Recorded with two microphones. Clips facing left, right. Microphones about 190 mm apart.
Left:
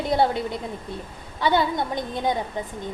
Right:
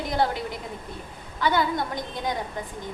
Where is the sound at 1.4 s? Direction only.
25° left (ahead or behind).